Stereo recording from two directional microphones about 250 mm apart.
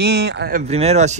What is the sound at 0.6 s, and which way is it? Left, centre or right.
Speech, right.